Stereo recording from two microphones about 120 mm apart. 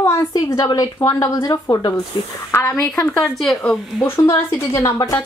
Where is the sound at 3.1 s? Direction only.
5° left (ahead or behind).